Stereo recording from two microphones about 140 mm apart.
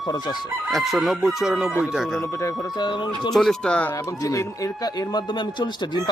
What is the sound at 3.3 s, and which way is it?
Speech, 5° left (ahead or behind).